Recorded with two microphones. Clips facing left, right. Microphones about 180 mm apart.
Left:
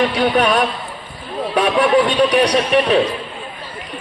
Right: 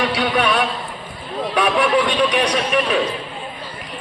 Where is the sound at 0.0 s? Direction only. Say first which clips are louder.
Left 4 dB; 40° left (ahead or behind).